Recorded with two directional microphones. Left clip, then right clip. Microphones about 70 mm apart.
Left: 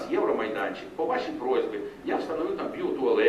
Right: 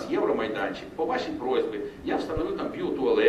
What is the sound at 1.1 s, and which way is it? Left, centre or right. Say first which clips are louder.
A man's voice: even; centre.